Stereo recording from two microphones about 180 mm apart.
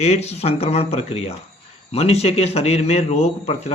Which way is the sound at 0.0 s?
35° left (ahead or behind).